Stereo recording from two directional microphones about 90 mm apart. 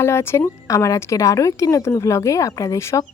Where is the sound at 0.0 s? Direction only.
30° left (ahead or behind).